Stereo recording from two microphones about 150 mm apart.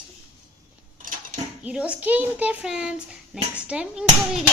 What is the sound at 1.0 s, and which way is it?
Dishes, 65° right (ahead or behind).